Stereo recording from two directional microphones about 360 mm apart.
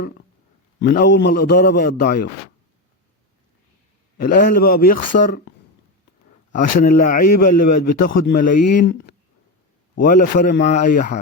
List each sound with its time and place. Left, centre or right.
0.8 s a man's voice: left
4.2 s a man's voice: left
6.5 s a man's voice: left
7.4 s a man's voice: left
7.9 s a man's voice: left